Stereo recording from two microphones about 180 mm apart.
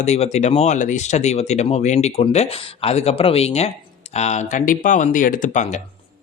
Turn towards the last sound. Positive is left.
turn(degrees=40)  # may be behind; listen again after turning